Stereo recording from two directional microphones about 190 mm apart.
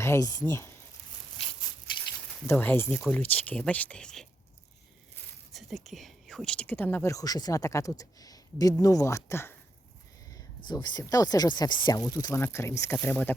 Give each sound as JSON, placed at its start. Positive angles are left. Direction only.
{"t": 0.0, "sound": "speech", "side_deg": 15}
{"t": 2.5, "sound": "speech", "side_deg": 10}
{"t": 5.5, "sound": "speech", "side_deg": 0}
{"t": 10.7, "sound": "speech", "side_deg": 20}